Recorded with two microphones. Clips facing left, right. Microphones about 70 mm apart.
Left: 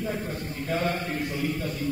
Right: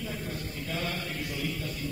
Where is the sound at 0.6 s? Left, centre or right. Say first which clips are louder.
Left 8 dB; left.